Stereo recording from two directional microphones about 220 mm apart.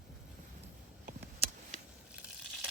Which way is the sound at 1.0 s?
35° right (ahead or behind).